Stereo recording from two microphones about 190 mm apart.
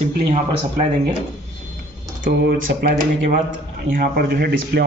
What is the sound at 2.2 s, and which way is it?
Speech, 55° right (ahead or behind).